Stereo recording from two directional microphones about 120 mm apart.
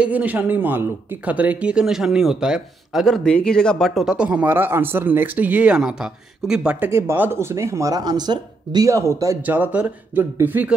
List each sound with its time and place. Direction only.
0.0 s speech: 15° right (ahead or behind)
9.6 s speech: 10° right (ahead or behind)